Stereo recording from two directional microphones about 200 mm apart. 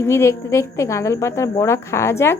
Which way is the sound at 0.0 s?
15° left (ahead or behind).